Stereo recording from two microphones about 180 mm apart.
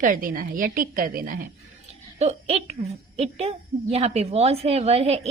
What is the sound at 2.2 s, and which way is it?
A child's voice, 35° right (ahead or behind).